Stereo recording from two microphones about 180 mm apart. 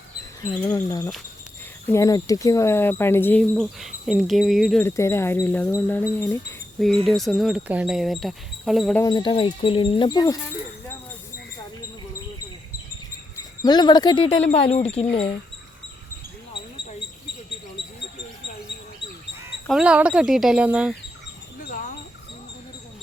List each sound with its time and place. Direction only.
0.6 s speech: 20° left (ahead or behind)
3.5 s speech: centre (ahead or behind)
4.8 s speech: 15° left (ahead or behind)
6.7 s speech: centre (ahead or behind)
9.0 s speech: 25° left (ahead or behind)
13.6 s speech: 25° left (ahead or behind)
14.5 s speech: 35° left (ahead or behind)
19.6 s speech: 5° right (ahead or behind)
21.6 s a sound: 50° left (ahead or behind)